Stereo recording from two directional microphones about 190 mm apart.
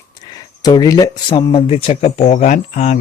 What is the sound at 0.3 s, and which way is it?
Speech, 20° left (ahead or behind).